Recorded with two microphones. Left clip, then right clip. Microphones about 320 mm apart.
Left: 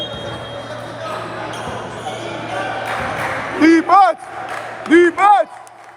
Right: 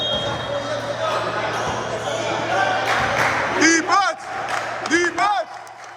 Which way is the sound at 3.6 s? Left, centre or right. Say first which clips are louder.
Left 7 dB; centre.